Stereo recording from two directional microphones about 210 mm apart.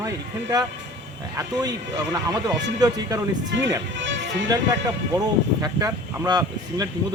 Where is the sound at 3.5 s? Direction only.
60° right (ahead or behind).